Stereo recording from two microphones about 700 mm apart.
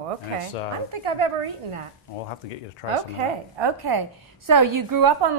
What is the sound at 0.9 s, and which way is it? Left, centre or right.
Speech, right.